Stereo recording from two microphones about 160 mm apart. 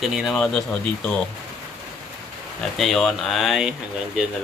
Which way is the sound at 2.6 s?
Centre (ahead or behind).